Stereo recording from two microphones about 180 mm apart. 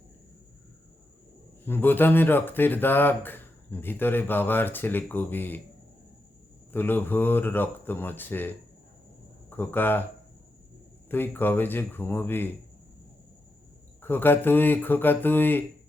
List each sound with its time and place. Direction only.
1.6 s speech: 10° left (ahead or behind)
6.7 s speech: 10° left (ahead or behind)
11.1 s speech: 10° left (ahead or behind)
14.0 s speech: 10° left (ahead or behind)